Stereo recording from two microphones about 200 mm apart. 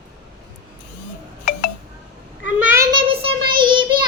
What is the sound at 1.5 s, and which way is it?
Wind chime, 50° left (ahead or behind).